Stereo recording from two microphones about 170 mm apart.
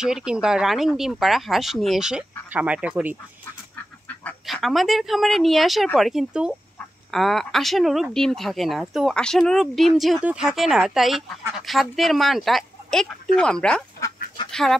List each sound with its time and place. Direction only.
0.0 s speech: 5° right (ahead or behind)
4.1 s duck: 10° left (ahead or behind)
4.5 s speech: centre (ahead or behind)
13.9 s duck: 25° left (ahead or behind)
14.5 s speech: centre (ahead or behind)